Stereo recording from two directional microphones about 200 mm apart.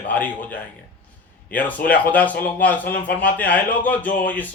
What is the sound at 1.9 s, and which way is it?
Speech, 10° left (ahead or behind).